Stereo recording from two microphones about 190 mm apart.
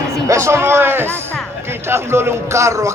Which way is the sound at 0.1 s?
15° right (ahead or behind).